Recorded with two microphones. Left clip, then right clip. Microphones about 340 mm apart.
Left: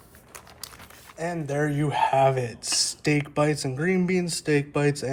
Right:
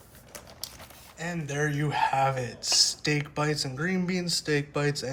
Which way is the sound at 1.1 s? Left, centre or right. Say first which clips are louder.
Left 5 dB; centre.